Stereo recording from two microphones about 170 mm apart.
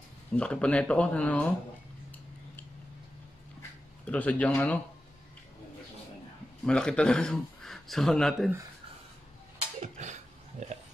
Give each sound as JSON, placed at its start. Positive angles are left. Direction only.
{"t": 0.4, "sound": "speech", "side_deg": 5}
{"t": 4.0, "sound": "speech", "side_deg": 10}
{"t": 6.6, "sound": "speech", "side_deg": 5}
{"t": 9.8, "sound": "a sound", "side_deg": -45}